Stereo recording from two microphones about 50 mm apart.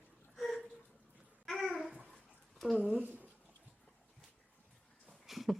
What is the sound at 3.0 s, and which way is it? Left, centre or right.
Speech, right.